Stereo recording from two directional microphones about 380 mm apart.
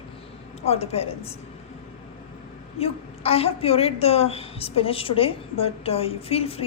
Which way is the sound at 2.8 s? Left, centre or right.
Centre.